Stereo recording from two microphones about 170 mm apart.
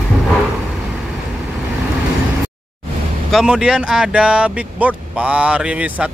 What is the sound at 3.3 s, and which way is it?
Speech, centre (ahead or behind).